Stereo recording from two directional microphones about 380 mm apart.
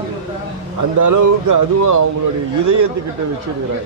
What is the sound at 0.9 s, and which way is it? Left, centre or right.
Speech, right.